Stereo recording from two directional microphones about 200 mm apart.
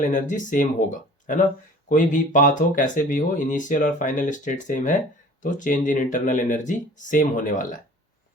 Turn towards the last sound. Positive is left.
turn(degrees=40)  # may be behind; listen again after turning